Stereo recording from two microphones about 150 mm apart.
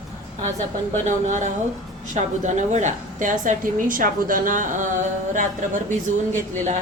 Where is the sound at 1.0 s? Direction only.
55° right (ahead or behind).